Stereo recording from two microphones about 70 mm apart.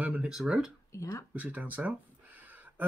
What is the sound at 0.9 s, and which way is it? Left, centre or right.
Speech, left.